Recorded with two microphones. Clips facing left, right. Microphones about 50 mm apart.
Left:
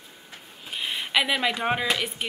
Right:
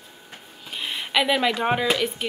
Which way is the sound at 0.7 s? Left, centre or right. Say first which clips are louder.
Even; centre.